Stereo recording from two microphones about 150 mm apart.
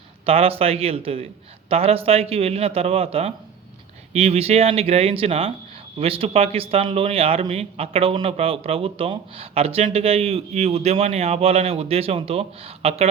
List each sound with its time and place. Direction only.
0.3 s a man's voice: 40° right (ahead or behind)